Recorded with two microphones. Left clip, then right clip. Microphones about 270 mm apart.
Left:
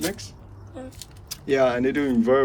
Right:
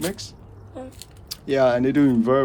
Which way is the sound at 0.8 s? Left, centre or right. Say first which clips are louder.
Right 2 dB; right.